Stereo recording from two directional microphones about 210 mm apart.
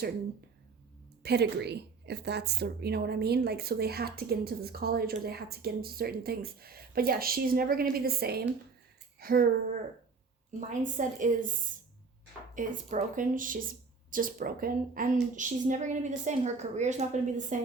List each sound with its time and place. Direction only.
1.2 s a woman's voice: 50° right (ahead or behind); by 17.6 s 35° right (ahead or behind)